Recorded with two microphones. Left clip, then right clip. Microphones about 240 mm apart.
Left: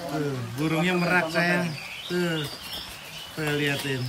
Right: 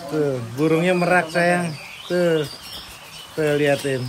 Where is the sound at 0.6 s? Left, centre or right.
Centre.